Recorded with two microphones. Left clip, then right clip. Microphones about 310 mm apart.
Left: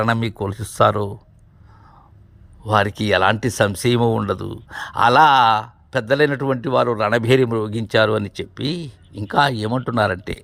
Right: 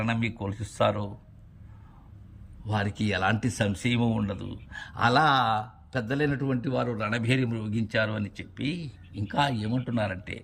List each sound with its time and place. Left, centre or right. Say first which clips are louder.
0.1 s speech: left 10 dB; centre
2.6 s a man's voice: left 13 dB; centre
4.0 s speech: left 11 dB; left
4.8 s a man's voice: left 10 dB; centre